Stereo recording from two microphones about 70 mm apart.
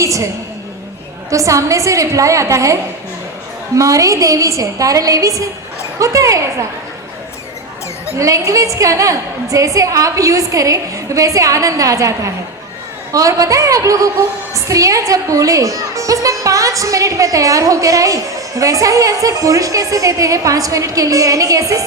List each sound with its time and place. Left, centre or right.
0.0 s a sound: right
1.3 s a woman's voice: right
3.8 s a woman's voice: right
8.2 s a woman's voice: right